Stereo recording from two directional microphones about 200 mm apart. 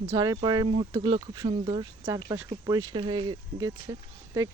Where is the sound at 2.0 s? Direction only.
10° right (ahead or behind).